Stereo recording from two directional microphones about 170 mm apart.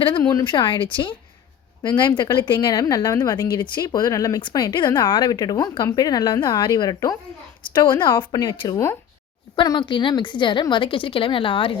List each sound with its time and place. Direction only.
0.0 s a woman's voice: 25° left (ahead or behind)